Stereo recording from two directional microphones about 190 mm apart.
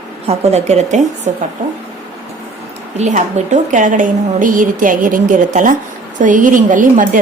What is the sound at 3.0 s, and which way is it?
A woman's voice, 40° right (ahead or behind).